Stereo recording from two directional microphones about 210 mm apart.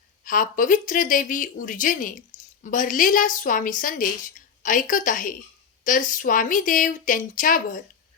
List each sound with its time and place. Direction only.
0.3 s a woman's voice: 40° left (ahead or behind)